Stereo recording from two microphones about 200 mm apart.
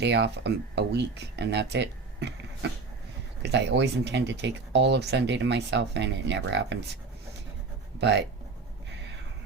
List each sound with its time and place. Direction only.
0.0 s speech: 60° right (ahead or behind)